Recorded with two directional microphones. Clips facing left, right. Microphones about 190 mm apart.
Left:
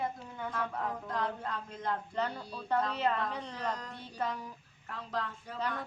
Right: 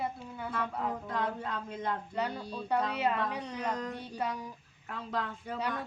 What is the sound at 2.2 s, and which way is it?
Speech, 10° right (ahead or behind).